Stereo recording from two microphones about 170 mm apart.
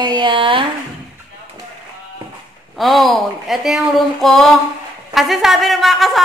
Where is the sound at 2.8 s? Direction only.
Centre (ahead or behind).